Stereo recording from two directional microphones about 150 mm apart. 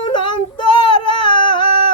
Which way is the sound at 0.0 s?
30° left (ahead or behind).